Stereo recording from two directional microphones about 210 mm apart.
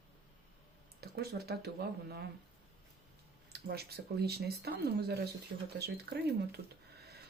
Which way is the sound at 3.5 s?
50° right (ahead or behind).